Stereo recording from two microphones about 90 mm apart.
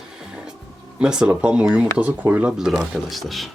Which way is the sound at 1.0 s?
10° right (ahead or behind).